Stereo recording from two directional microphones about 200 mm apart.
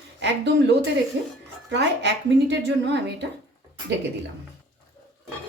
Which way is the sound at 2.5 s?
60° right (ahead or behind).